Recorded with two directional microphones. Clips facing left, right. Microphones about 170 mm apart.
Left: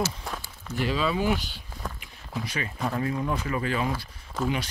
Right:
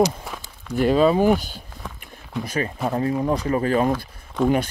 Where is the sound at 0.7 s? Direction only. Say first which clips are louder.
Right 10 dB; 50° right (ahead or behind).